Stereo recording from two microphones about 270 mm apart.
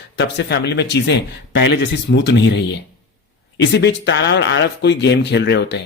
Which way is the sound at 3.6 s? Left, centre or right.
Left.